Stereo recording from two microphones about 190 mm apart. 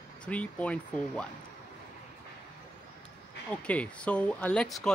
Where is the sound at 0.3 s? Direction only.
5° left (ahead or behind).